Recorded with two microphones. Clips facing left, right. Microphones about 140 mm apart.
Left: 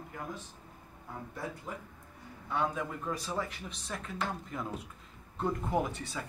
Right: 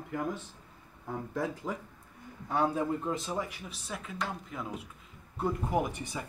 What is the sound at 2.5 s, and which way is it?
Speech, 35° right (ahead or behind).